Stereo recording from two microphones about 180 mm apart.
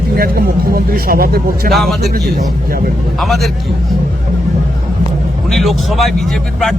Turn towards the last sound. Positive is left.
turn(degrees=0)  # may be behind; listen again after turning